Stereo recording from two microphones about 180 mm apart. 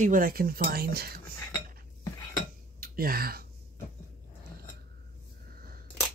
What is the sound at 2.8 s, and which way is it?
Speech, 55° right (ahead or behind).